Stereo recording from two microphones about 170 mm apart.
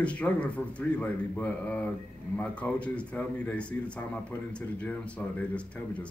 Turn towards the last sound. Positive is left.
turn(degrees=5)  # may be behind; listen again after turning